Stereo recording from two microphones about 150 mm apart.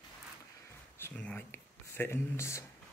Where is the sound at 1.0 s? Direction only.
10° left (ahead or behind).